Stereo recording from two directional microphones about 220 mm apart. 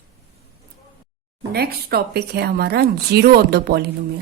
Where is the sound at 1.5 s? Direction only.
45° right (ahead or behind).